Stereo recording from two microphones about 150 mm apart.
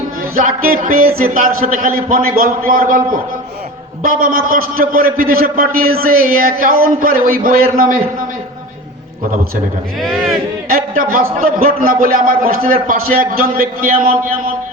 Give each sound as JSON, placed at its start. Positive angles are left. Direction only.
{"t": 0.3, "sound": "a man's voice", "side_deg": -70}
{"t": 10.0, "sound": "speech", "side_deg": 0}
{"t": 10.7, "sound": "a man's voice", "side_deg": -70}